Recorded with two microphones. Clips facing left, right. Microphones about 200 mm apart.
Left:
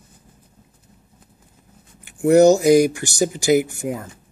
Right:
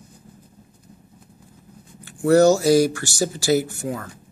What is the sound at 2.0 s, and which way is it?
Speech, 15° left (ahead or behind).